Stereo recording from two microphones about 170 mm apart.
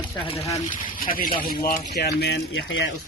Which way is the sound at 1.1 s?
55° left (ahead or behind).